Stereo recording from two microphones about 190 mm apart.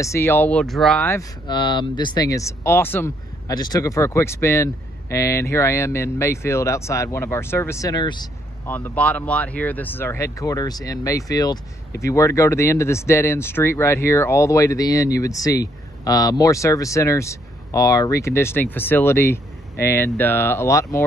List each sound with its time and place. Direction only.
0.0 s speech: 15° left (ahead or behind)
1.5 s speech: 25° left (ahead or behind)
8.6 s speech: 10° left (ahead or behind)